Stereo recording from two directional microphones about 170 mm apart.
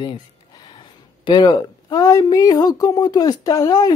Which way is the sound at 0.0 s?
25° left (ahead or behind).